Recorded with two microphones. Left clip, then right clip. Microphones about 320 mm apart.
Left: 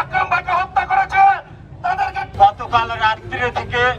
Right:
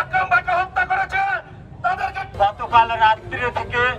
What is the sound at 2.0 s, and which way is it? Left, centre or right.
Vehicle, centre.